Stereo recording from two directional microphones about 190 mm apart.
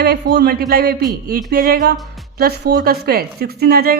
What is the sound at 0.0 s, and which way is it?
Speech, 55° right (ahead or behind).